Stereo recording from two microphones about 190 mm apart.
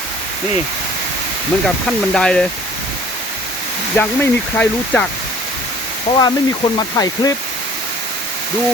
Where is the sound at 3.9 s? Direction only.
10° left (ahead or behind).